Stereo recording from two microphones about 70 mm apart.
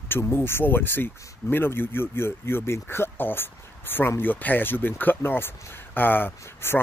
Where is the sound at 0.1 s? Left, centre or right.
Left.